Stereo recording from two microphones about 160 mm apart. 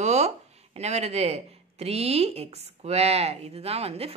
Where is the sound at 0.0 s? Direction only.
45° right (ahead or behind).